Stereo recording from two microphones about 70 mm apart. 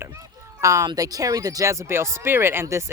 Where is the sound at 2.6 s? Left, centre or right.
Right.